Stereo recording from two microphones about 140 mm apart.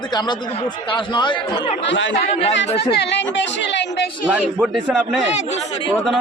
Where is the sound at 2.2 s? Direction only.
50° left (ahead or behind).